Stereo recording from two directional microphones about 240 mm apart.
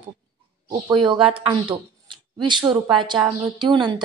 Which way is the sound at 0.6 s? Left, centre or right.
Centre.